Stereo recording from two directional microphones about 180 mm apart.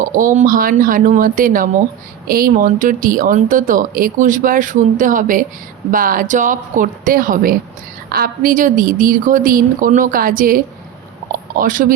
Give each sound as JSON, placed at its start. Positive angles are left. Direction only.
{"t": 0.0, "sound": "speech", "side_deg": -45}
{"t": 11.6, "sound": "speech", "side_deg": -45}